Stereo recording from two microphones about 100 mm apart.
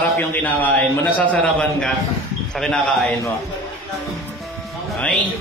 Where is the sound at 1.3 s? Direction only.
5° left (ahead or behind).